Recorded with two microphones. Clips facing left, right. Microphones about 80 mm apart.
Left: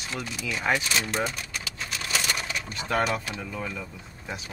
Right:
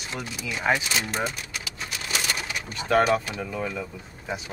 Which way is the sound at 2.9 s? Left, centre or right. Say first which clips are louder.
Right 6 dB; centre.